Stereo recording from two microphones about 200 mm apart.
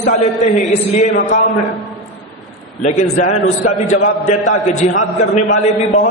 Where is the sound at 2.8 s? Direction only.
35° left (ahead or behind).